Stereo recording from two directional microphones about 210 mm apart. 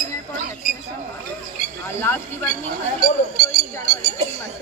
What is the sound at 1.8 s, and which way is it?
Speech, 10° left (ahead or behind).